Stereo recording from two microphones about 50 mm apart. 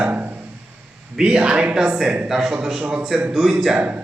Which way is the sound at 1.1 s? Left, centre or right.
Centre.